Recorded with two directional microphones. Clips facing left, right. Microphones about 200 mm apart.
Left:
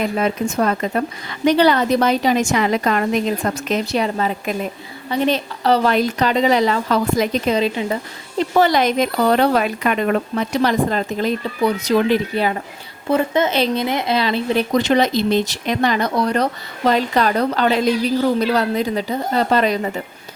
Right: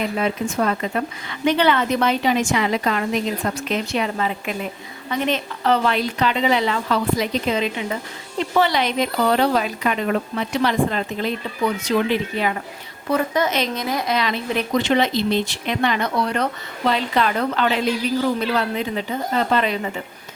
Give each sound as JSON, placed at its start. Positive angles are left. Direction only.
{"t": 0.2, "sound": "a woman's voice", "side_deg": 45}
{"t": 10.5, "sound": "speech", "side_deg": 40}